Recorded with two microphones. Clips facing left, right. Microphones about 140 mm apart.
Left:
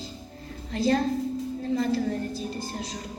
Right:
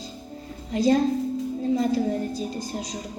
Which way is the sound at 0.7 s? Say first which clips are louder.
Right 4 dB; 15° right (ahead or behind).